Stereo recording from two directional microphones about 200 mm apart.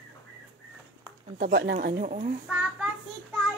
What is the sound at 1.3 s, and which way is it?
Speech, 50° right (ahead or behind).